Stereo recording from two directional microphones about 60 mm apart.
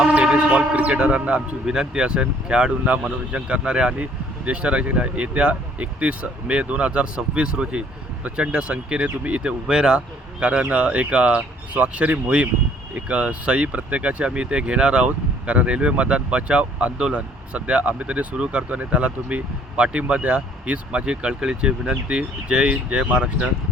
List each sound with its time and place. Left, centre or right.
0.0 s speech: centre
10.4 s speech: right